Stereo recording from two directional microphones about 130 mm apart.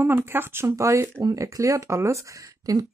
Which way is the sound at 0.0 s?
15° right (ahead or behind).